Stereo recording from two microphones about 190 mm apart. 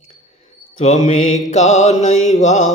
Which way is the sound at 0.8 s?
35° left (ahead or behind).